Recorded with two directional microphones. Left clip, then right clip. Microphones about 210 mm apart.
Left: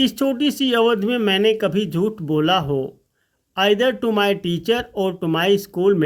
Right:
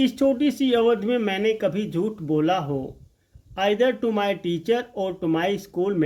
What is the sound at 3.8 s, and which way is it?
Speech, 45° left (ahead or behind).